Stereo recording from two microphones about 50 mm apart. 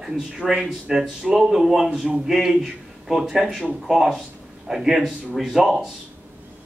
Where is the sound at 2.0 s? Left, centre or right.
Centre.